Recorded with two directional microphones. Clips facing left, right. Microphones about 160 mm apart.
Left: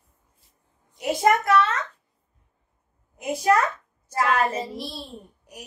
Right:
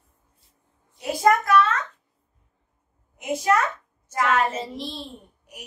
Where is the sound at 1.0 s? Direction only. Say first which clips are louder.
Right 1 dB; 25° left (ahead or behind).